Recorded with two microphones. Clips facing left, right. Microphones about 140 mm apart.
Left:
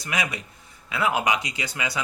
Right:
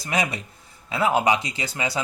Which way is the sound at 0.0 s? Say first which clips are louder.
Right 4 dB; 30° right (ahead or behind).